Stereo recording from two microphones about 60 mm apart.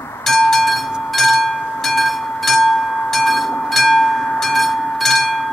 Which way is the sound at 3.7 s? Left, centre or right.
Centre.